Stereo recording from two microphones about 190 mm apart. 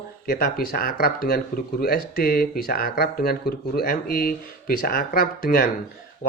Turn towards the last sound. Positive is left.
turn(degrees=55)  # may be behind; listen again after turning